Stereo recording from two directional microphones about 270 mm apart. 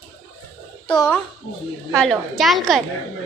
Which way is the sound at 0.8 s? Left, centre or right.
Centre.